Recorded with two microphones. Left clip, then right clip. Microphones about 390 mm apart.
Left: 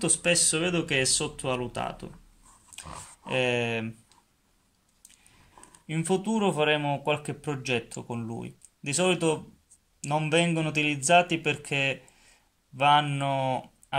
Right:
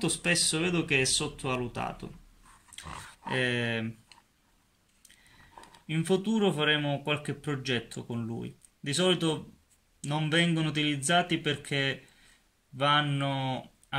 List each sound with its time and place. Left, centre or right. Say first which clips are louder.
0.0 s speech: left 3 dB; centre
5.9 s speech: left 1 dB; centre